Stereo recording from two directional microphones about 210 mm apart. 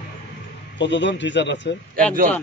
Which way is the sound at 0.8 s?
60° left (ahead or behind).